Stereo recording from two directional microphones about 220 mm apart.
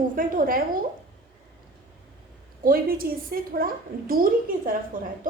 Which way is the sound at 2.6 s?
40° right (ahead or behind).